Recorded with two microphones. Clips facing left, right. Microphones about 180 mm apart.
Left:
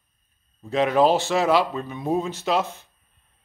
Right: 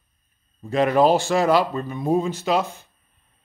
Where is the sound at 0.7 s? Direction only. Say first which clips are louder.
Right 2 dB; centre (ahead or behind).